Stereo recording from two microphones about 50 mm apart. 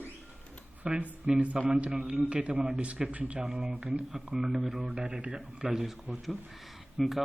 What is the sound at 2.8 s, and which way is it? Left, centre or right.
Speech, right.